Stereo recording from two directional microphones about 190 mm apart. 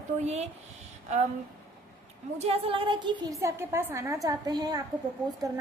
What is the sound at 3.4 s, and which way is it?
Speech, 15° right (ahead or behind).